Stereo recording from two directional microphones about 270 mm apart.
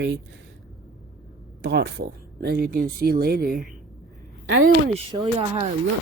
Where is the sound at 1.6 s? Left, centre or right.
Right.